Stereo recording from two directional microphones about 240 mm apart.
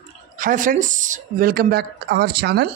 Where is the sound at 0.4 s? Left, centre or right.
Right.